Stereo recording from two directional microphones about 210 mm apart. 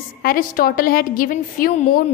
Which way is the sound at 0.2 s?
45° left (ahead or behind).